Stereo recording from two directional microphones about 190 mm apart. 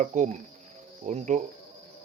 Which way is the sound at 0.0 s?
40° right (ahead or behind).